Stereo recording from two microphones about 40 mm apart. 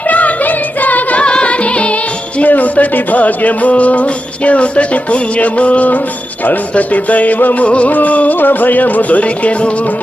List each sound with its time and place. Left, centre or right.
0.1 s music: left
1.2 s music: left
2.4 s music: left
7.6 s music: left
8.4 s music: left